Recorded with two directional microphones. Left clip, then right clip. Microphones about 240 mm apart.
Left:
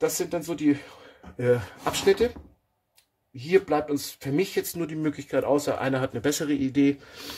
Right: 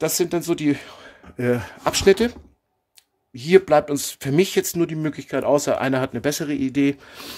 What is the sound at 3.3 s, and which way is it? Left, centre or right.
Speech, right.